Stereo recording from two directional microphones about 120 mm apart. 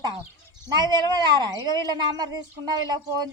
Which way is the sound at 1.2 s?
35° right (ahead or behind).